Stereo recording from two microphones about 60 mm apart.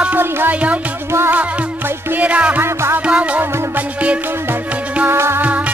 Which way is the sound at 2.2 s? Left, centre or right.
Right.